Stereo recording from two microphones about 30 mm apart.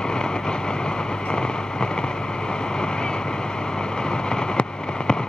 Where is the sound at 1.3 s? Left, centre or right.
Left.